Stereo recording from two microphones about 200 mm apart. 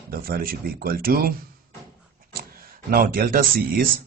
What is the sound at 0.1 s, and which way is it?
A man's voice, 50° right (ahead or behind).